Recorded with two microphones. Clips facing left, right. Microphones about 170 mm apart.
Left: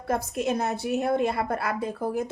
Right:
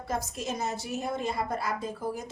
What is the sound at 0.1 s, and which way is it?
A woman's voice, 60° left (ahead or behind).